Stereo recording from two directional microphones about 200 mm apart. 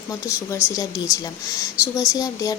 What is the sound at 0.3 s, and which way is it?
Speech, 15° left (ahead or behind).